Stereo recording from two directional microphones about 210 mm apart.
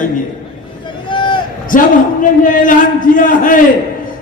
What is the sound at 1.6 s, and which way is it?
A man's voice, 40° left (ahead or behind).